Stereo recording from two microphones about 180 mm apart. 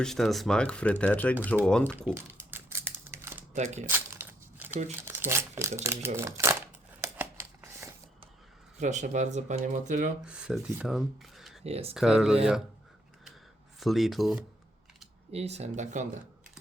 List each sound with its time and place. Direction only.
0.0 s speech: centre (ahead or behind)
2.4 s typewriter: 10° right (ahead or behind)
3.5 s speech: 40° right (ahead or behind)
3.8 s crumpling: 10° right (ahead or behind)
4.7 s speech: 45° right (ahead or behind)
5.0 s speech: 15° right (ahead or behind)
7.0 s crumpling: 15° right (ahead or behind)
8.8 s speech: 40° right (ahead or behind)
10.2 s speech: 5° right (ahead or behind)
11.6 s speech: 35° right (ahead or behind)
11.9 s speech: centre (ahead or behind)
13.7 s speech: centre (ahead or behind)
15.3 s speech: 35° right (ahead or behind)